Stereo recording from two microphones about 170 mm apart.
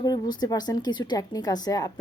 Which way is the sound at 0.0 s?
25° left (ahead or behind).